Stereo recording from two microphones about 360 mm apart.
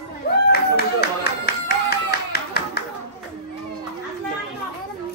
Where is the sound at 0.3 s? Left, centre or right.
Left.